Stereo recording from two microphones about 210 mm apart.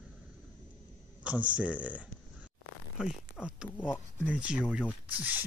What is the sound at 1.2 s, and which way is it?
Speech, 5° right (ahead or behind).